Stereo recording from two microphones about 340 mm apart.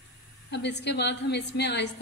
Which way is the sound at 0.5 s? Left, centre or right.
Left.